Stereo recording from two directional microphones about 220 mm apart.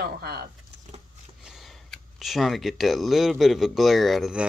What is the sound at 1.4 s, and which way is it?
Speech, centre (ahead or behind).